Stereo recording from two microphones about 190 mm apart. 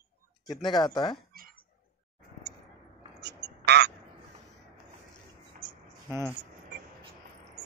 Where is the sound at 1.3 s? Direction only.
50° right (ahead or behind).